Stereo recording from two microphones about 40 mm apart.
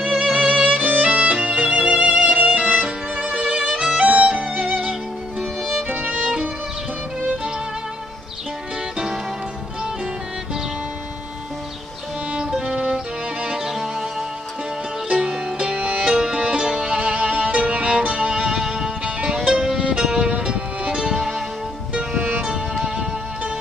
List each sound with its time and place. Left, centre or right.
0.5 s violin: right
0.7 s music: right
1.1 s music: right; by 5.9 s centre
5.9 s music: right
8.9 s music: centre
12.4 s music: centre
15.0 s music: right
16.2 s music: centre
19.0 s music: right
19.5 s music: centre
20.1 s music: right
21.9 s music: right
22.8 s music: centre